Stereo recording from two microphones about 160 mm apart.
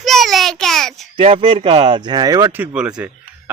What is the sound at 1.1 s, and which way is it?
Speech, 35° right (ahead or behind).